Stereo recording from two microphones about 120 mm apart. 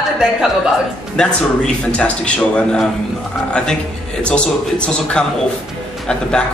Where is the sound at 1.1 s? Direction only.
5° left (ahead or behind).